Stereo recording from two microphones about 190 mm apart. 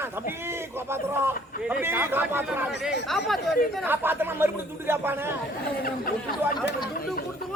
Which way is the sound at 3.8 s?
10° right (ahead or behind).